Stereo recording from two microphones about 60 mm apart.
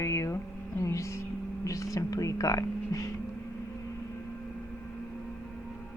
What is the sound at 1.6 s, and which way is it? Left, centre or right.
Speech, left.